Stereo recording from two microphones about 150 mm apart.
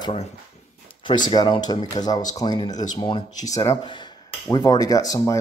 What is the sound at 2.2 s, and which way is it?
Speech, 25° left (ahead or behind).